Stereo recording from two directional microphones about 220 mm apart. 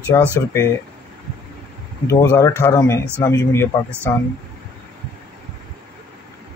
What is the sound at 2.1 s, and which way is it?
Speech, 15° left (ahead or behind).